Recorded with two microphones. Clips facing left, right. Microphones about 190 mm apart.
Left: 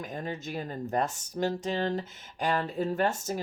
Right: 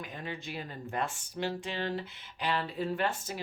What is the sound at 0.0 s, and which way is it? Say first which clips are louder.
Speech: left 5 dB; 45° left (ahead or behind).